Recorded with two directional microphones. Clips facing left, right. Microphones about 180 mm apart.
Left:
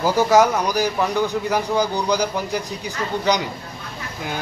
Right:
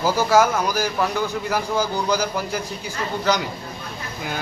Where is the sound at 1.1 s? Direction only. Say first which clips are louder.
Left 3 dB; 15° left (ahead or behind).